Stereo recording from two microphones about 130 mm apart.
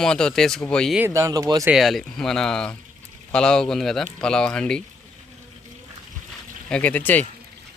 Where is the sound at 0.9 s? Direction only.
20° right (ahead or behind).